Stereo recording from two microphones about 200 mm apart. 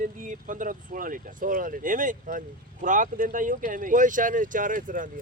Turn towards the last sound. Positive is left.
turn(degrees=-40)  # may be behind; listen again after turning